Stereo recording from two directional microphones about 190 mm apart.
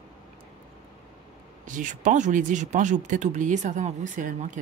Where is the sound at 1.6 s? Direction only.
40° right (ahead or behind).